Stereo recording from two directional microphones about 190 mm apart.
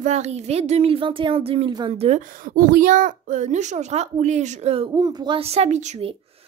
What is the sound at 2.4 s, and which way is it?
Speech, 50° right (ahead or behind).